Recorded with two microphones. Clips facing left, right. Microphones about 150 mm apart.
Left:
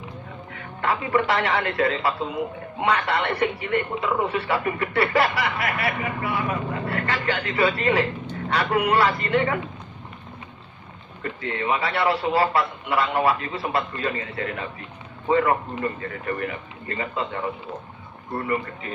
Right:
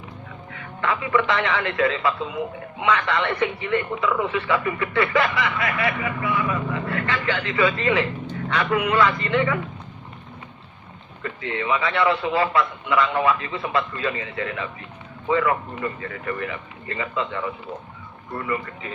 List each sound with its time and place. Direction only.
0.5 s speech: 35° left (ahead or behind)
11.2 s speech: 40° left (ahead or behind)